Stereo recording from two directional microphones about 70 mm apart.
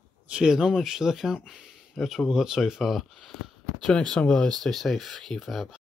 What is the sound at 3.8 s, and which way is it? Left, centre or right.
Speech, centre.